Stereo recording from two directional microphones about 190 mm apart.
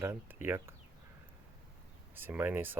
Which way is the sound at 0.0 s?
10° right (ahead or behind).